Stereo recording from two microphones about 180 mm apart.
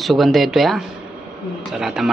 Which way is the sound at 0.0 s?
Centre (ahead or behind).